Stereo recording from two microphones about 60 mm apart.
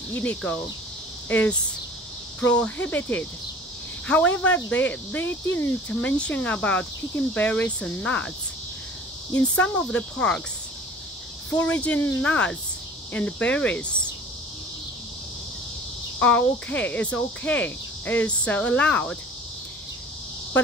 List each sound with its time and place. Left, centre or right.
0.1 s cricket: left
5.9 s cricket: centre
9.3 s cricket: left
11.5 s cricket: left
16.2 s cricket: left